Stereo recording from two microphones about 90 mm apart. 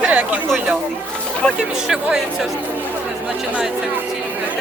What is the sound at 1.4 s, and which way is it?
Speech, 15° left (ahead or behind).